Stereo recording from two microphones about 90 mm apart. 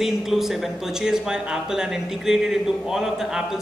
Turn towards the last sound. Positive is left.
turn(degrees=-5)  # may be behind; listen again after turning